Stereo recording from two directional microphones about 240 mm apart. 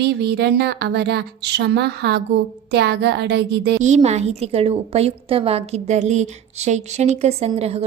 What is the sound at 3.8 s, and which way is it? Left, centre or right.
A woman's voice, right.